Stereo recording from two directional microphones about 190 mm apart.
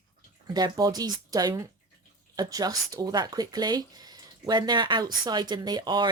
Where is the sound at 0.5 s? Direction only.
20° right (ahead or behind).